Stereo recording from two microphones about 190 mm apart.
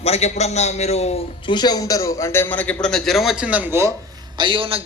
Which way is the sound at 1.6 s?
20° left (ahead or behind).